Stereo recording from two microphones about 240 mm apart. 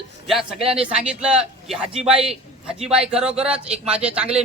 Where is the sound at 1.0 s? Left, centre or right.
Centre.